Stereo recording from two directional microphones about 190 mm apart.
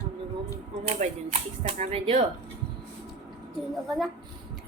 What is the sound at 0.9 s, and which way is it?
Speech, 30° right (ahead or behind).